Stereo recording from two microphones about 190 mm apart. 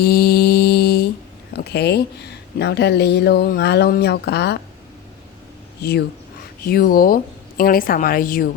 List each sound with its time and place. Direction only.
0.0 s mantra: 55° left (ahead or behind)
1.5 s speech: 60° left (ahead or behind)
5.8 s a woman's voice: 60° left (ahead or behind)